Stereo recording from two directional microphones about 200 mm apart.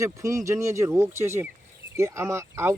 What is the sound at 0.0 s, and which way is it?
Speech, 15° right (ahead or behind).